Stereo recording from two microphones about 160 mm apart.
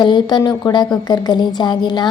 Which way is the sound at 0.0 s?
30° left (ahead or behind).